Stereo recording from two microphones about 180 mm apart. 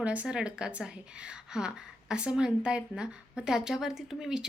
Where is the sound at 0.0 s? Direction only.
5° right (ahead or behind).